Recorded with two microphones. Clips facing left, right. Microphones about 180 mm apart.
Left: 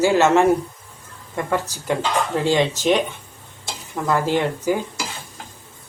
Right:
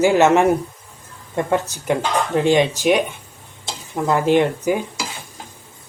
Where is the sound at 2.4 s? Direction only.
15° right (ahead or behind).